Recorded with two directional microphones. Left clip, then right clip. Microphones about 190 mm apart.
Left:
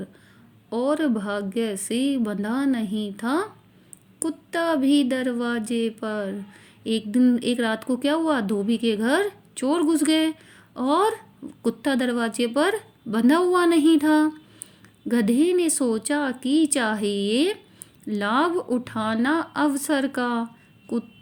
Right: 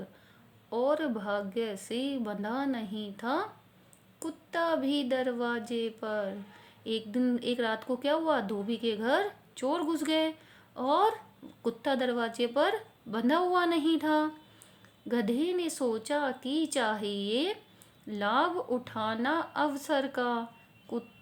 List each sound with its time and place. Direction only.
0.7 s speech: 20° left (ahead or behind)